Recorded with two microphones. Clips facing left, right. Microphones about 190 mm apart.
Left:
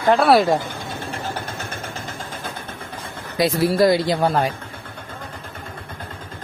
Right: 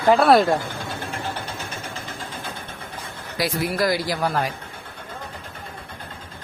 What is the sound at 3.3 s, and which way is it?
Speech, 25° left (ahead or behind).